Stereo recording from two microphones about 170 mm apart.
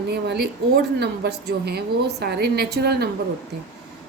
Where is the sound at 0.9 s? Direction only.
70° right (ahead or behind).